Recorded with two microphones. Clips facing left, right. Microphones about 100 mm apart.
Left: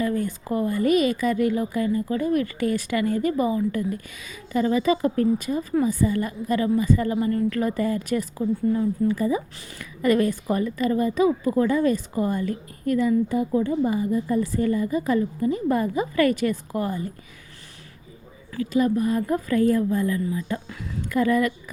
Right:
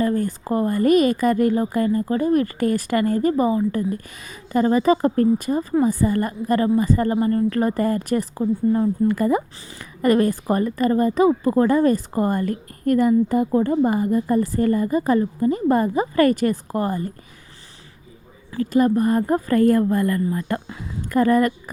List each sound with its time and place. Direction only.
0.0 s a woman's voice: 40° right (ahead or behind)
9.0 s speech: 60° right (ahead or behind)
10.0 s a woman's voice: 45° right (ahead or behind)
18.5 s a woman's voice: 45° right (ahead or behind)
21.1 s a woman's voice: 45° right (ahead or behind)